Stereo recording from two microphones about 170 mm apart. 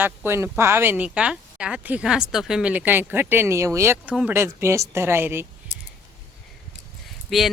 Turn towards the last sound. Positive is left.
turn(degrees=0)  # may be behind; listen again after turning